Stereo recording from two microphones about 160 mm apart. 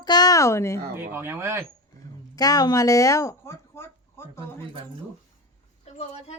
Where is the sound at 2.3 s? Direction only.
25° left (ahead or behind).